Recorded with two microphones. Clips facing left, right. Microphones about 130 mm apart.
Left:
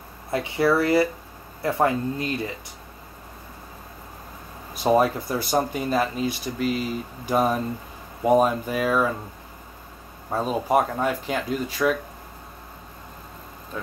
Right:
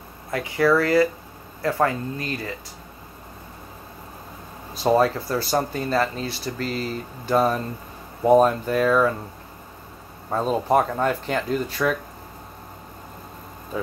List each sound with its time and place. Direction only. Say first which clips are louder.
0.3 s speech: right 1 dB; 25° left (ahead or behind)
4.9 s speech: even; 15° left (ahead or behind)
10.3 s speech: right 2 dB; 5° left (ahead or behind)